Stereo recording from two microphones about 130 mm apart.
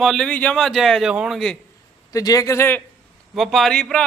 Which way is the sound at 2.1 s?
25° left (ahead or behind).